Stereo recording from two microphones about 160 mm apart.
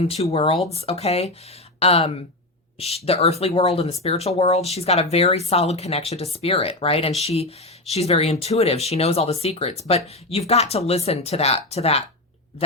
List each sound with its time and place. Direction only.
0.3 s speech: 35° left (ahead or behind)